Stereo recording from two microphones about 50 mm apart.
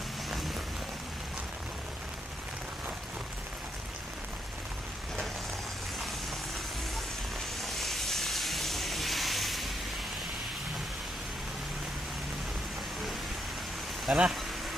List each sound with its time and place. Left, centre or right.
7.6 s steam: centre
14.1 s speech: centre